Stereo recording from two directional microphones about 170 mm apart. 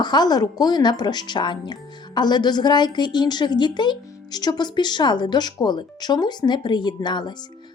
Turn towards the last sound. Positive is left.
turn(degrees=25)  # may be behind; listen again after turning